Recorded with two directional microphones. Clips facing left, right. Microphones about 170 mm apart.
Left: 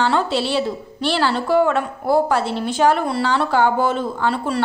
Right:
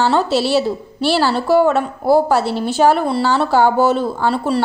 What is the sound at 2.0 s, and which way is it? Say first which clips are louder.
A woman's voice: right 4 dB; 30° right (ahead or behind).